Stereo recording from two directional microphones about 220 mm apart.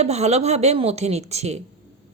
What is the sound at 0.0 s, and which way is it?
Speech, 30° right (ahead or behind).